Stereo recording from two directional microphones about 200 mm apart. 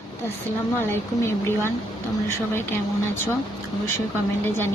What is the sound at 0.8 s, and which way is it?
Speech, 10° left (ahead or behind).